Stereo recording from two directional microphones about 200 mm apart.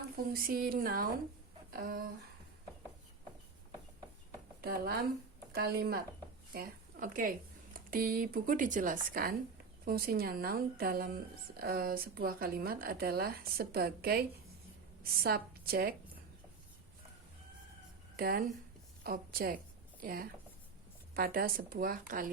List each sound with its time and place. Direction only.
0.3 s a woman's voice: 45° right (ahead or behind)
4.6 s a woman's voice: 50° right (ahead or behind)
18.2 s a woman's voice: 50° right (ahead or behind)